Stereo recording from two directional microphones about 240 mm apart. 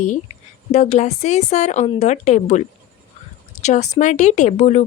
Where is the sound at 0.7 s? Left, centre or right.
Left.